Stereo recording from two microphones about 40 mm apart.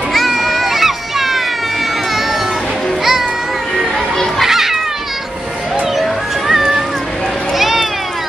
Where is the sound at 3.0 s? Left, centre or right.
Centre.